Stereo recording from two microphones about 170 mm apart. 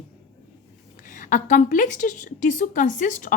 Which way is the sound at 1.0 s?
50° left (ahead or behind).